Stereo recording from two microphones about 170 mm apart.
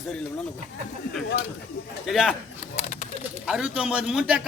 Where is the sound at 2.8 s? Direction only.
40° left (ahead or behind).